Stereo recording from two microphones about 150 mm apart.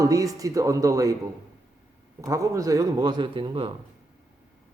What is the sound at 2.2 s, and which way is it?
A man's voice, 20° right (ahead or behind).